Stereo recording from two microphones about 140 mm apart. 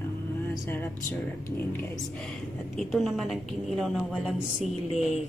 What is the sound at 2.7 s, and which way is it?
A woman's voice, centre (ahead or behind).